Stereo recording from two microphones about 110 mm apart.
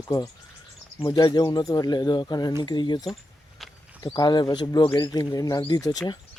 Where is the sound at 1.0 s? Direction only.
35° left (ahead or behind).